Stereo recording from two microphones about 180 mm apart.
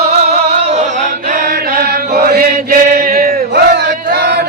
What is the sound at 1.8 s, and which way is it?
Chant, 60° right (ahead or behind).